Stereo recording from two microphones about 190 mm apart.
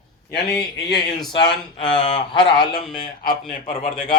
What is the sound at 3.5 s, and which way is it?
Speech, 40° left (ahead or behind).